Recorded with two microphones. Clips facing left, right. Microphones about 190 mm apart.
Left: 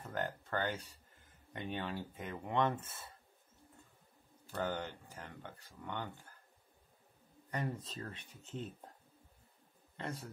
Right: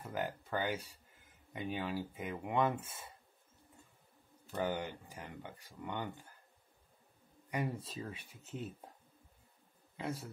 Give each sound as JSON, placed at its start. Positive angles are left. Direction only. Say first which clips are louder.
{"t": 0.0, "sound": "speech", "louder": "right 1 dB", "side_deg": -10}
{"t": 4.6, "sound": "speech", "louder": "right 2 dB", "side_deg": -15}
{"t": 7.5, "sound": "speech", "louder": "right 2 dB", "side_deg": -10}
{"t": 9.9, "sound": "a man's voice", "louder": "right 3 dB", "side_deg": -5}